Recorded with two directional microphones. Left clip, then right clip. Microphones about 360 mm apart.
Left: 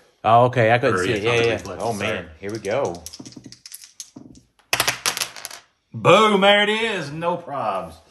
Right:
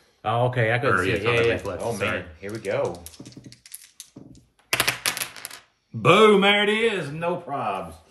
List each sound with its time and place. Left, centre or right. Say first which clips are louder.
0.2 s speech: left 8 dB; centre
3.0 s typing: left 5 dB; centre
4.7 s typewriter: left 2 dB; centre
6.0 s speech: left 2 dB; centre